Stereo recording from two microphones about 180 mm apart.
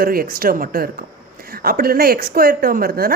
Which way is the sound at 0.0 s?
55° right (ahead or behind).